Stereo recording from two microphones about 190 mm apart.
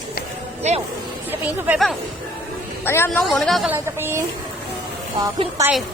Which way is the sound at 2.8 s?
10° left (ahead or behind).